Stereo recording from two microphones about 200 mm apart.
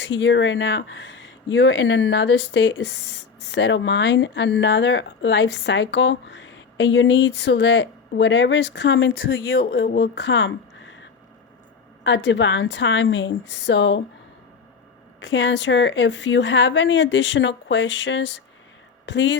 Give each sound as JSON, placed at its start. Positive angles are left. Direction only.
{"t": 0.0, "sound": "speech", "side_deg": 65}
{"t": 12.0, "sound": "speech", "side_deg": 65}
{"t": 15.2, "sound": "speech", "side_deg": 65}